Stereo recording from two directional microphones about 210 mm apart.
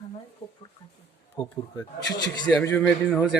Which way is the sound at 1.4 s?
25° left (ahead or behind).